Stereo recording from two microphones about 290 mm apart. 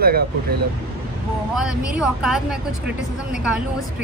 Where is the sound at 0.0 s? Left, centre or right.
Right.